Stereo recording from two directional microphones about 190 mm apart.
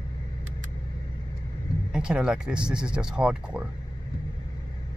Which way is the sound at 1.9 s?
5° right (ahead or behind).